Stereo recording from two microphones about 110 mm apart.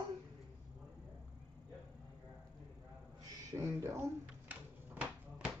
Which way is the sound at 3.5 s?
25° right (ahead or behind).